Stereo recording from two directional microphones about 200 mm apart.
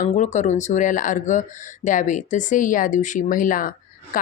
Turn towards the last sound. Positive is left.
turn(degrees=45)  # may be behind; listen again after turning